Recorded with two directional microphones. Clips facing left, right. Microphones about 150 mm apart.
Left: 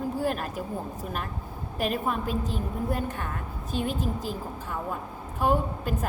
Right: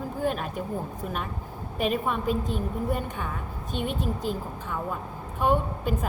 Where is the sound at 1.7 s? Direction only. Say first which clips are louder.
Right 1 dB; centre (ahead or behind).